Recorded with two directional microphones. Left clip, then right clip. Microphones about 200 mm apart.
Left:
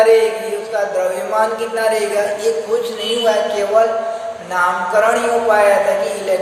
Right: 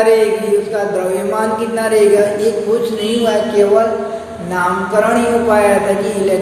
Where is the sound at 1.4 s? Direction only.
15° left (ahead or behind).